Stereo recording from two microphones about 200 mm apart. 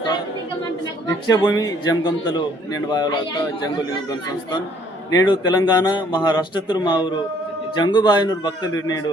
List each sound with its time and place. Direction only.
1.3 s a man's voice: 20° left (ahead or behind)
5.3 s a man's voice: 20° left (ahead or behind)